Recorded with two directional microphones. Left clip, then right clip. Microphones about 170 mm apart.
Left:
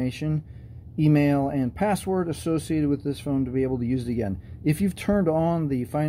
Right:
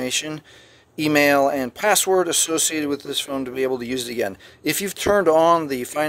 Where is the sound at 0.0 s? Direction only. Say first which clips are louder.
Right 6 dB; 35° right (ahead or behind).